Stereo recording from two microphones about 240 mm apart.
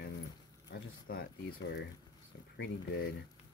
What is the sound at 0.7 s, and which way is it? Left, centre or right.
Speech, left.